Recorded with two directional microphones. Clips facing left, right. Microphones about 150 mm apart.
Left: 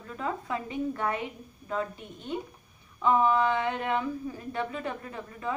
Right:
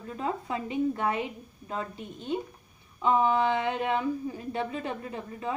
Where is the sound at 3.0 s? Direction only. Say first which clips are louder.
Even; 20° right (ahead or behind).